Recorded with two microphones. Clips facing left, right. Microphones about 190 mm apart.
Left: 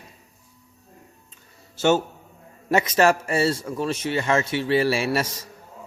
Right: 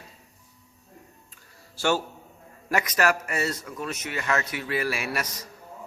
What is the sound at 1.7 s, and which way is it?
A man's voice, 20° left (ahead or behind).